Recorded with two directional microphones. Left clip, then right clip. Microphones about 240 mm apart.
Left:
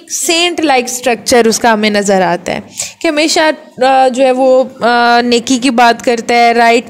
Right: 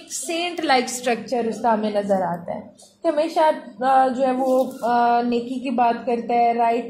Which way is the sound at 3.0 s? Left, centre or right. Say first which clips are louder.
Left 9 dB; left.